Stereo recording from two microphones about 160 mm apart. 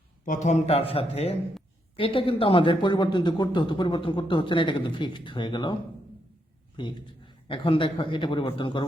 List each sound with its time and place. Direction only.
0.3 s speech: 50° left (ahead or behind); by 5.7 s 30° left (ahead or behind)
6.7 s speech: 30° left (ahead or behind)